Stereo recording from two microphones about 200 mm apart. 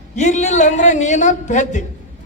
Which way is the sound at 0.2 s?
35° left (ahead or behind).